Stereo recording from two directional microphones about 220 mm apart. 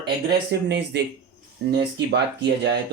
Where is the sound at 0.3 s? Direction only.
50° right (ahead or behind).